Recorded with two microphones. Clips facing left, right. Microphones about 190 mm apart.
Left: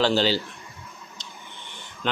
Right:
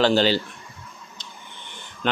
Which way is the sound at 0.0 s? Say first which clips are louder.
Right 3 dB; 55° right (ahead or behind).